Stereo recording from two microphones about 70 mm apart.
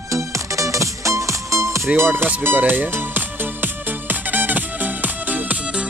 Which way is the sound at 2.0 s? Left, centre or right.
Right.